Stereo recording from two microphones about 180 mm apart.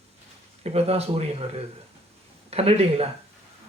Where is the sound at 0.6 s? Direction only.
35° right (ahead or behind).